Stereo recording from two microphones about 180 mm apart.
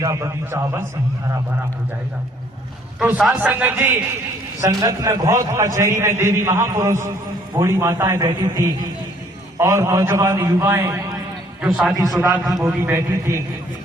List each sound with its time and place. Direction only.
0.0 s a man's voice: 15° right (ahead or behind)
3.0 s a man's voice: 5° right (ahead or behind)
11.9 s a man's voice: 20° right (ahead or behind)